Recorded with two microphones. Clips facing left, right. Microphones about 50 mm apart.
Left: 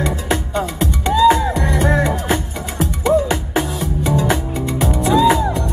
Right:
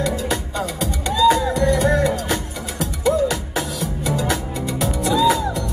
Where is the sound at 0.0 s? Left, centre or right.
Left.